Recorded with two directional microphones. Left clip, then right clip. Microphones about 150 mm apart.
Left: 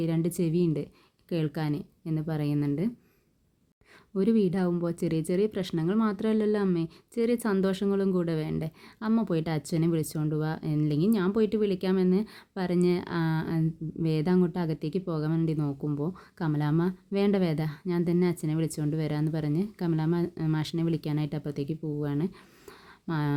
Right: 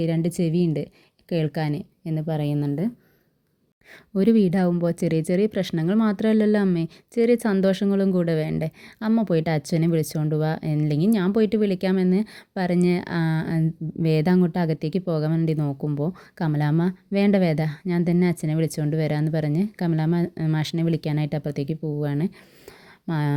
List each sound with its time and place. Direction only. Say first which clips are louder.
0.0 s speech: right 4 dB; 35° right (ahead or behind)
4.1 s speech: right 6 dB; 45° right (ahead or behind)